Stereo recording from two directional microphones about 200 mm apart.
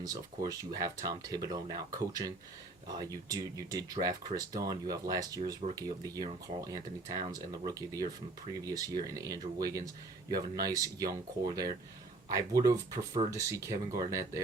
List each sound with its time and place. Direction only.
0.0 s speech: 20° right (ahead or behind)